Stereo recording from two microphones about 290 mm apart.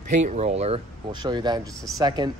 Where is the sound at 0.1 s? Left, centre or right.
Right.